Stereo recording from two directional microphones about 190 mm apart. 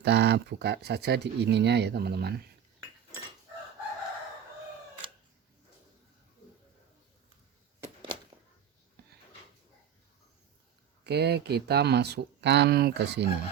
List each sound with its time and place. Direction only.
0.0 s speech: 65° right (ahead or behind)
9.0 s a sound: 55° right (ahead or behind)
11.0 s speech: 60° right (ahead or behind)